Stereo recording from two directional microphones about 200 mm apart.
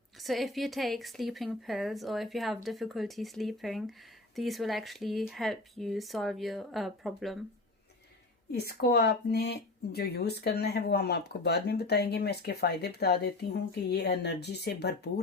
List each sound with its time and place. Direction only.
0.2 s speech: centre (ahead or behind)
8.5 s speech: 55° left (ahead or behind)